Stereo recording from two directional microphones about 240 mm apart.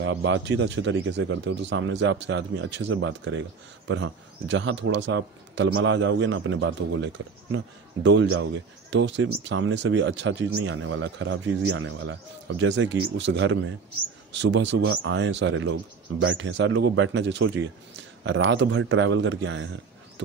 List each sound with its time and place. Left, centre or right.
0.0 s speech: right